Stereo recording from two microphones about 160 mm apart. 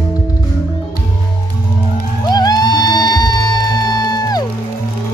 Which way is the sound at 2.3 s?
25° left (ahead or behind).